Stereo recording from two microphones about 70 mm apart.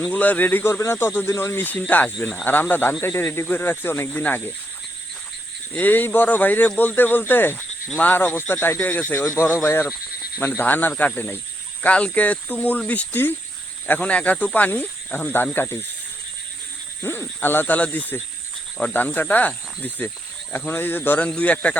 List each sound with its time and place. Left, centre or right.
0.0 s speech: left
5.7 s speech: left
17.0 s speech: left
21.2 s speech: centre